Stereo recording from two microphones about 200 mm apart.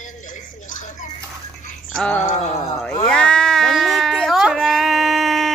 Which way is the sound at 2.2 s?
35° left (ahead or behind).